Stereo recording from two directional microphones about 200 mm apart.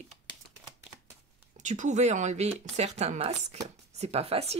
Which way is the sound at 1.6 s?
35° right (ahead or behind).